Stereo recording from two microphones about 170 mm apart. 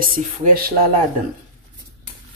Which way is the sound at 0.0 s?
60° right (ahead or behind).